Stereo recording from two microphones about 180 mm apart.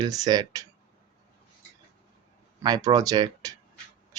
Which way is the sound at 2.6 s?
20° right (ahead or behind).